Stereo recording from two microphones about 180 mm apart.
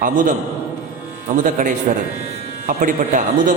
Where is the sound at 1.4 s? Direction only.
45° right (ahead or behind).